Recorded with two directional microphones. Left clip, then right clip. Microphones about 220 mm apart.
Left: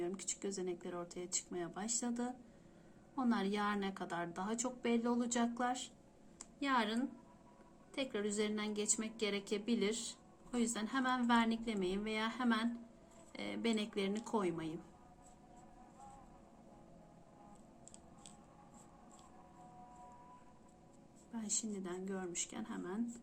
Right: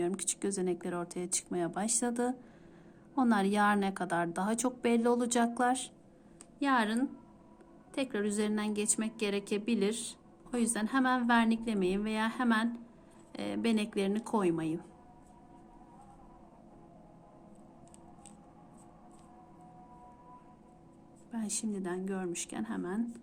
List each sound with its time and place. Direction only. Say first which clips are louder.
0.0 s a woman's voice: right 8 dB; 50° right (ahead or behind)
21.3 s a woman's voice: right 5 dB; 45° right (ahead or behind)